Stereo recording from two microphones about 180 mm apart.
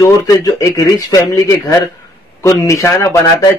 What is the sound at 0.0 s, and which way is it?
A man's voice, 20° left (ahead or behind).